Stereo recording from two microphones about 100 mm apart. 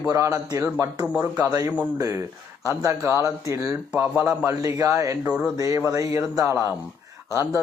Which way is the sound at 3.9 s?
15° right (ahead or behind).